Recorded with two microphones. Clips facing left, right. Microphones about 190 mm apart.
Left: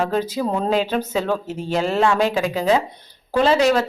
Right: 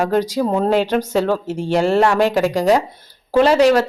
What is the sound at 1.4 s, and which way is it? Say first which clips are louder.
Speech: right 5 dB; 85° right.